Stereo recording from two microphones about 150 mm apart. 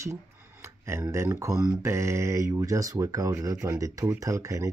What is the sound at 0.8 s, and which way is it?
Speech, 20° right (ahead or behind).